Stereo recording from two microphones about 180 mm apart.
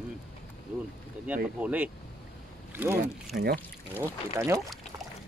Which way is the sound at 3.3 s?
60° right (ahead or behind).